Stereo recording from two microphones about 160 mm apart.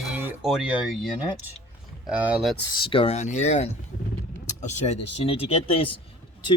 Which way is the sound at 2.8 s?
35° left (ahead or behind).